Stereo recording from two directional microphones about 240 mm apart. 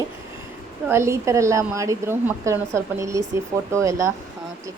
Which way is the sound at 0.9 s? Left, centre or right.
Centre.